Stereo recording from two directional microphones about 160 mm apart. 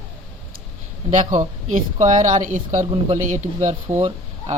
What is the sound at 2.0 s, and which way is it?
Speech, 50° right (ahead or behind).